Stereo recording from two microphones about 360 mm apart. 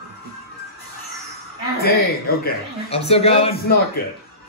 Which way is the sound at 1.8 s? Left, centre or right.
Left.